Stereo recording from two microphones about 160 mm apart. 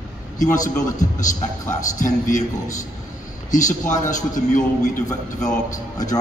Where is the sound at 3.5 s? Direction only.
50° left (ahead or behind).